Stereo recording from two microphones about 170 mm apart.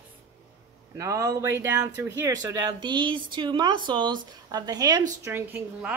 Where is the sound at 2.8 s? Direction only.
25° right (ahead or behind).